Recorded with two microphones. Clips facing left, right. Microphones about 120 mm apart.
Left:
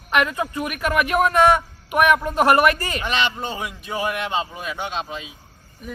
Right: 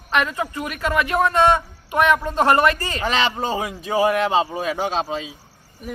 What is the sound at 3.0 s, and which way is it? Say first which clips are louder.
Speech: right 2 dB; 35° right (ahead or behind).